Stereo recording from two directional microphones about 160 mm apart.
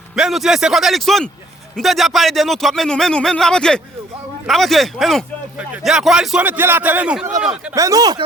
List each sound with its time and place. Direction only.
0.2 s speech: centre (ahead or behind)
7.8 s speech: 20° right (ahead or behind)